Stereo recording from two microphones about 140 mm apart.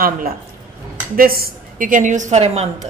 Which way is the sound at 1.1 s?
90° right.